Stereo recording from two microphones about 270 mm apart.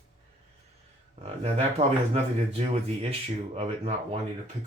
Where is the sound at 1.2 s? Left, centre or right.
Right.